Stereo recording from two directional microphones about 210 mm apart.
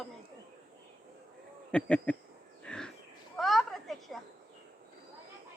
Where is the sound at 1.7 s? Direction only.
5° left (ahead or behind).